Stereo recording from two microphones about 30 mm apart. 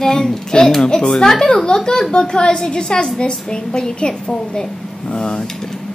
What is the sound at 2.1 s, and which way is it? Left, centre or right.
A woman's voice, left.